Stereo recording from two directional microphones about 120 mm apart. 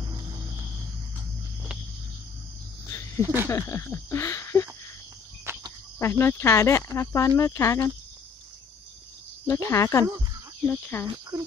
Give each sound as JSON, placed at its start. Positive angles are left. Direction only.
{"t": 2.9, "sound": "cricket", "side_deg": 25}
{"t": 3.4, "sound": "a sound", "side_deg": 25}
{"t": 5.5, "sound": "cricket", "side_deg": -20}
{"t": 5.9, "sound": "speech", "side_deg": 20}
{"t": 9.5, "sound": "speech", "side_deg": 25}
{"t": 11.3, "sound": "speech", "side_deg": -35}